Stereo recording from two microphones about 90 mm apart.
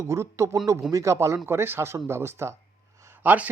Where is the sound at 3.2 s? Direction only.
15° right (ahead or behind).